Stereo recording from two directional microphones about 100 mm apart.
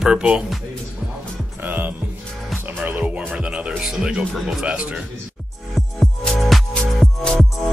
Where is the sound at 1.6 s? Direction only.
20° right (ahead or behind).